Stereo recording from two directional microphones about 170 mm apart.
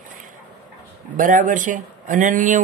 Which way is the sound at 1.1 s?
50° right (ahead or behind).